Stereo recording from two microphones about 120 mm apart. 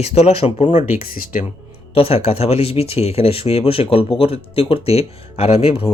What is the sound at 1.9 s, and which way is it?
Speech, 55° left (ahead or behind).